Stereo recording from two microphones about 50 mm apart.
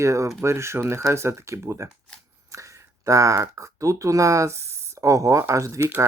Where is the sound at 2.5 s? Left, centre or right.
Right.